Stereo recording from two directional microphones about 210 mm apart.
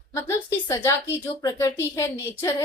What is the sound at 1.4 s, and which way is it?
Speech, 15° left (ahead or behind).